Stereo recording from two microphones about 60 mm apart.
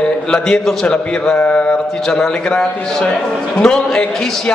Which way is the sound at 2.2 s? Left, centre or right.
Centre.